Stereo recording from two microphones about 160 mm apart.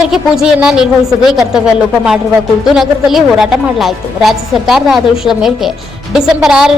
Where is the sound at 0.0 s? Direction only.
5° right (ahead or behind).